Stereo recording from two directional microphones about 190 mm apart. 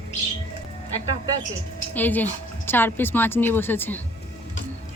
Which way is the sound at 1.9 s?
10° left (ahead or behind).